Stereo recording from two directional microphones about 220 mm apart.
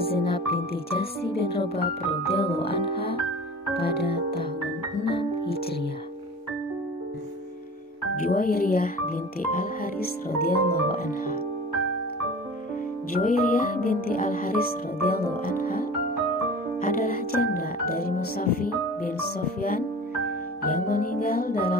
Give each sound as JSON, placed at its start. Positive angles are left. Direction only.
{"t": 0.2, "sound": "speech", "side_deg": 45}
{"t": 1.6, "sound": "speech", "side_deg": 25}
{"t": 3.8, "sound": "music", "side_deg": 45}
{"t": 8.2, "sound": "speech", "side_deg": 40}
{"t": 13.1, "sound": "speech", "side_deg": 40}
{"t": 16.8, "sound": "music", "side_deg": 40}
{"t": 20.2, "sound": "music", "side_deg": 40}